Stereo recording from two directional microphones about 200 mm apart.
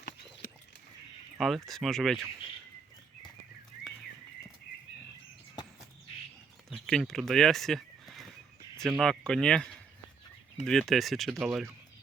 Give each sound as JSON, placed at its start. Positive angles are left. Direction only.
{"t": 0.4, "sound": "a sound", "side_deg": 45}
{"t": 1.4, "sound": "speech", "side_deg": 0}
{"t": 6.7, "sound": "speech", "side_deg": 0}